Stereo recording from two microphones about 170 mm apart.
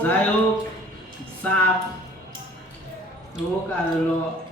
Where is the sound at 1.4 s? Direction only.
10° left (ahead or behind).